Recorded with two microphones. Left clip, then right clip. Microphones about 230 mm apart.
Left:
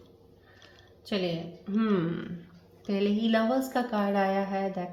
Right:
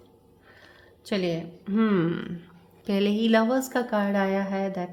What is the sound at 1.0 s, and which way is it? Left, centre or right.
A woman's voice, right.